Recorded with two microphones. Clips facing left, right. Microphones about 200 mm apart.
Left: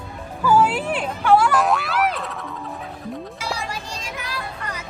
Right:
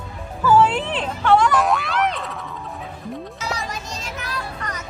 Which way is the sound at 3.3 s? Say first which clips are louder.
Even; 10° left (ahead or behind).